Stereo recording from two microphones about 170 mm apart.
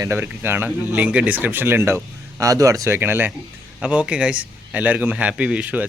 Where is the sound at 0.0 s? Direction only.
15° right (ahead or behind).